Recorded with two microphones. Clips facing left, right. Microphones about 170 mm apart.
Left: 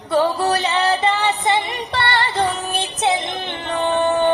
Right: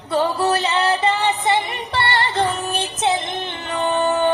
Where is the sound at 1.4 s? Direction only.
15° left (ahead or behind).